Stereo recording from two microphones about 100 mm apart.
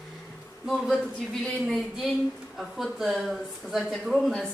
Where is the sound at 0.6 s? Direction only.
Centre (ahead or behind).